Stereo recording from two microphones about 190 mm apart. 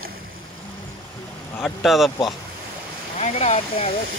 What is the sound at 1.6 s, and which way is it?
Speech, centre (ahead or behind).